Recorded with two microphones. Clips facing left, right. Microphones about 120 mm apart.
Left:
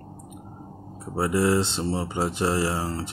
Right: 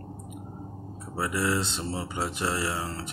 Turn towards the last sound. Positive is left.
turn(degrees=30)  # may be behind; listen again after turning